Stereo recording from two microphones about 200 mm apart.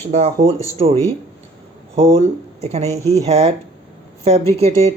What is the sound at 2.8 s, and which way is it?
Speech, 15° left (ahead or behind).